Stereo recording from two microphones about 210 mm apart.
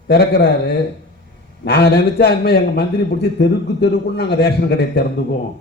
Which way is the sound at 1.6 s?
50° left (ahead or behind).